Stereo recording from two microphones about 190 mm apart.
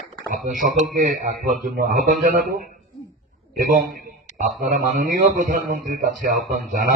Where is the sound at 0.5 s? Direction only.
45° right (ahead or behind).